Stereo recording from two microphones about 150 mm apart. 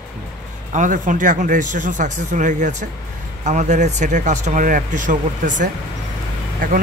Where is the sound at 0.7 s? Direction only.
55° right (ahead or behind).